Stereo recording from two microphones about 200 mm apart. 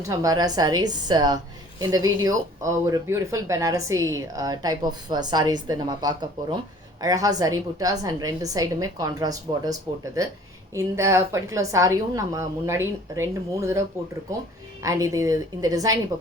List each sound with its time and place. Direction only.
0.1 s a woman's voice: 15° right (ahead or behind)